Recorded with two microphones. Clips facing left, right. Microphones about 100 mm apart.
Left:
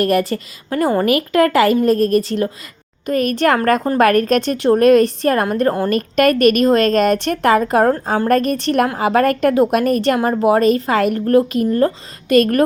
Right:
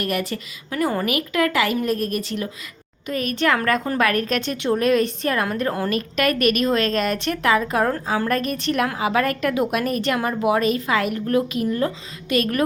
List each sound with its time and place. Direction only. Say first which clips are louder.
0.0 s a woman's voice: left 9 dB; 35° left (ahead or behind)
5.0 s a woman's voice: left 6 dB; 40° left (ahead or behind)